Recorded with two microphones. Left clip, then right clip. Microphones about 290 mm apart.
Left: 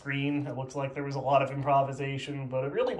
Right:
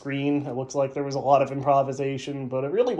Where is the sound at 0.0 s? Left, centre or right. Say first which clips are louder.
Right 5 dB; centre.